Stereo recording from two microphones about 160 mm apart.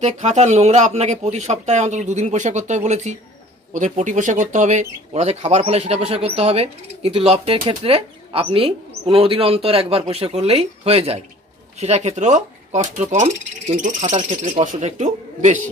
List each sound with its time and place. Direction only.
0.0 s speech: 45° right (ahead or behind)